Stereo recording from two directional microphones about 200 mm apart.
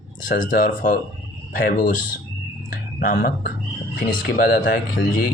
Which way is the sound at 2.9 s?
45° left (ahead or behind).